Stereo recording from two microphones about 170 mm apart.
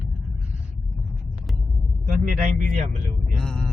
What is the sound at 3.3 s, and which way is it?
Music, 5° left (ahead or behind).